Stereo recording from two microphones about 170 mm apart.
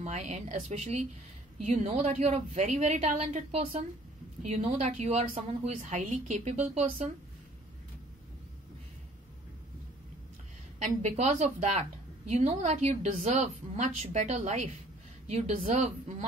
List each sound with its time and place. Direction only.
0.0 s a woman's voice: 45° right (ahead or behind)
10.8 s a woman's voice: 45° right (ahead or behind)